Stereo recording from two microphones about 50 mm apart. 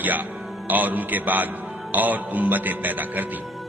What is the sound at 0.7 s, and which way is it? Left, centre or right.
A man's voice, right.